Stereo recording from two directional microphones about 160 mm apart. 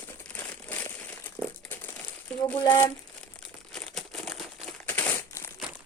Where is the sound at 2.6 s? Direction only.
25° left (ahead or behind).